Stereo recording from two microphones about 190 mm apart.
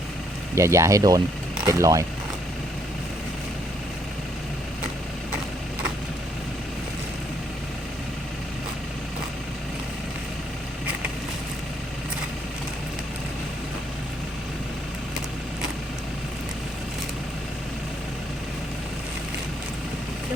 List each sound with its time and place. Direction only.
0.5 s speech: 15° right (ahead or behind)